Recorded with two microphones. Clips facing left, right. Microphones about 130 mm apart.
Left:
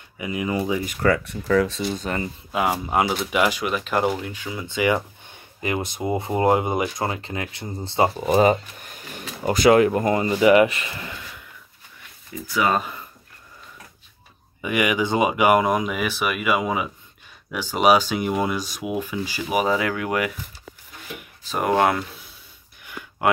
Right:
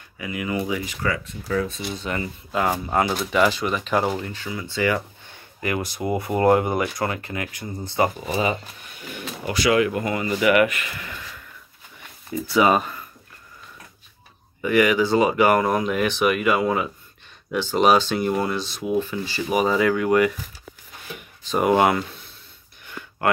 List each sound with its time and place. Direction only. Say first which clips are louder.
0.2 s speech: left 2 dB; 25° left (ahead or behind)
0.8 s speech: left 6 dB; 55° left (ahead or behind); by 1.9 s 85° left
1.9 s speech: left 2 dB; 40° left (ahead or behind)
2.5 s speech: even; 10° left (ahead or behind)
4.5 s speech: left 2 dB; 20° left (ahead or behind)
8.3 s speech: left 7 dB; 45° left (ahead or behind)
10.3 s speech: left 2 dB; 25° left (ahead or behind)
12.4 s speech: right 4 dB; 25° right (ahead or behind)
14.6 s speech: right 4 dB; 15° left (ahead or behind)
21.5 s speech: right 2 dB; 5° right (ahead or behind)